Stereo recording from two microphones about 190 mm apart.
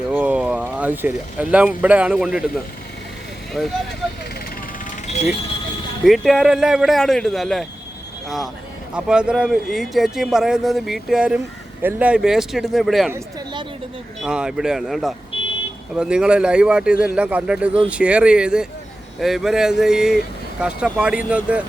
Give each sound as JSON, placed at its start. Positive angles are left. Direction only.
{"t": 0.1, "sound": "speech", "side_deg": -10}
{"t": 3.6, "sound": "speech", "side_deg": 0}
{"t": 6.1, "sound": "speech", "side_deg": 0}
{"t": 8.9, "sound": "speech", "side_deg": -5}
{"t": 14.2, "sound": "speech", "side_deg": -5}